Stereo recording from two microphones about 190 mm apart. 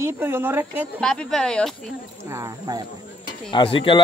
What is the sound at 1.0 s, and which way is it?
Speech, 5° left (ahead or behind).